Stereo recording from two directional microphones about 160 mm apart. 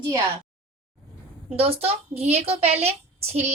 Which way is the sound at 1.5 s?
40° right (ahead or behind).